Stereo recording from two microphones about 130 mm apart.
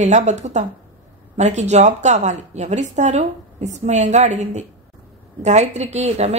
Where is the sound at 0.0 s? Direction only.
60° right (ahead or behind).